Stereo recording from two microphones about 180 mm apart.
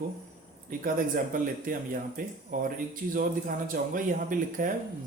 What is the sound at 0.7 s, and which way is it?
Speech, 50° right (ahead or behind).